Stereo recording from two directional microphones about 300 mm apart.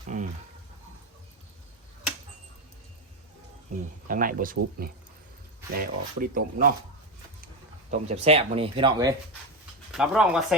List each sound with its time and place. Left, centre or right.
0.1 s a sound: right
4.1 s speech: right
9.9 s speech: centre